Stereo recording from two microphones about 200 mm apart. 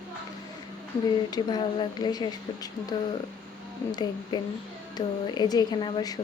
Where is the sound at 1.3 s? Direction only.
20° left (ahead or behind).